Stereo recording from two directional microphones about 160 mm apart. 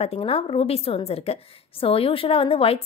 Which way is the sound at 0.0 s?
40° left (ahead or behind).